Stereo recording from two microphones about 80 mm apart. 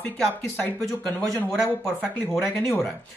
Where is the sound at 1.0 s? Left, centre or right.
Centre.